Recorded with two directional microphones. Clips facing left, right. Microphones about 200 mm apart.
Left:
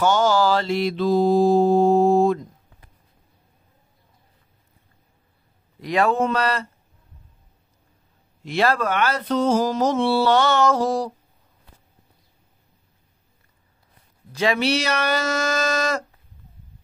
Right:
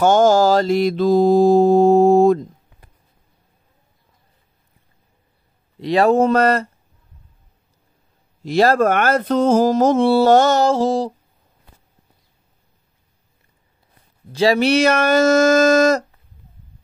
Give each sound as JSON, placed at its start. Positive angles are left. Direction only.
{"t": 0.0, "sound": "mantra", "side_deg": -50}
{"t": 5.8, "sound": "speech", "side_deg": -35}
{"t": 8.5, "sound": "mantra", "side_deg": -40}
{"t": 10.7, "sound": "a sound", "side_deg": -25}
{"t": 14.3, "sound": "speech", "side_deg": -35}
{"t": 14.6, "sound": "mantra", "side_deg": -50}